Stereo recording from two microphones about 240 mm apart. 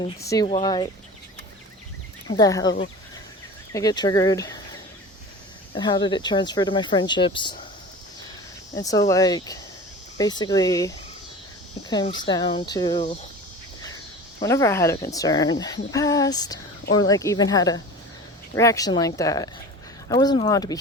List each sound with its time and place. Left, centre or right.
0.3 s speech: centre
2.3 s speech: centre
5.7 s speech: centre
8.7 s speech: centre
14.4 s speech: centre